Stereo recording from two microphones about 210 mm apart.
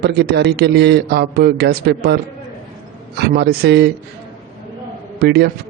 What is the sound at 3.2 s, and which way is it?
Speech, 50° right (ahead or behind).